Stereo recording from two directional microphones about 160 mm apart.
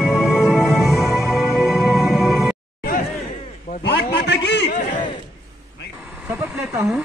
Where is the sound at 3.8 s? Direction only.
90° left.